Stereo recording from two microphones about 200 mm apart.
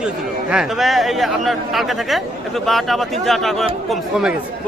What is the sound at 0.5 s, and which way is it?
Speech, centre (ahead or behind).